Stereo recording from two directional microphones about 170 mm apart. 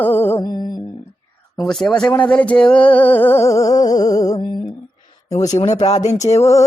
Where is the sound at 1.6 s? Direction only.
5° left (ahead or behind); by 4.3 s 20° left (ahead or behind).